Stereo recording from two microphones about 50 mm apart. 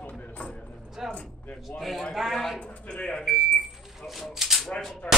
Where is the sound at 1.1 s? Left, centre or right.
Left.